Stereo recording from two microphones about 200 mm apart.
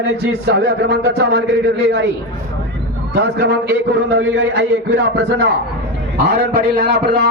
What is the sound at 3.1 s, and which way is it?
Speech, 60° right (ahead or behind).